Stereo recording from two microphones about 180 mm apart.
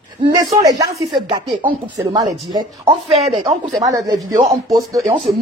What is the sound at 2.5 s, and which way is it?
Speech, 25° right (ahead or behind).